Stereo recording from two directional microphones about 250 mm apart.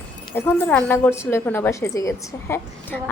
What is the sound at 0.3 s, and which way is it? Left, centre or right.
A woman's voice, centre.